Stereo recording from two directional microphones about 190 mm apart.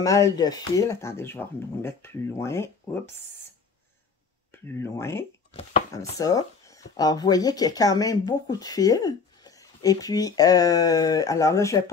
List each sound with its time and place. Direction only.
0.0 s speech: 20° left (ahead or behind)
4.5 s speech: 15° left (ahead or behind)
5.5 s chopping: 35° left (ahead or behind)
6.1 s speech: 20° left (ahead or behind)